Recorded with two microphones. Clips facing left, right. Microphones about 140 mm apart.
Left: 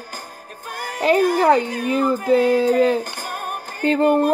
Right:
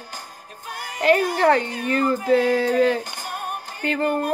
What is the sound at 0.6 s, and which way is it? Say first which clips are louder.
Music: left 4 dB; 50° left (ahead or behind).